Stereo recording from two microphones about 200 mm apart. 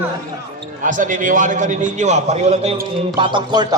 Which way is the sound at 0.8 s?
40° right (ahead or behind).